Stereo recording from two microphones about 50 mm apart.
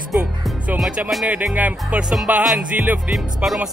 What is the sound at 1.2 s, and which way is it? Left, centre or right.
Speech, right.